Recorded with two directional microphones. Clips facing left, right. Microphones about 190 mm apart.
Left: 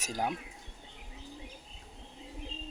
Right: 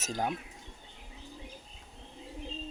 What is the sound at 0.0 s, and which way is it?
Speech, 10° left (ahead or behind).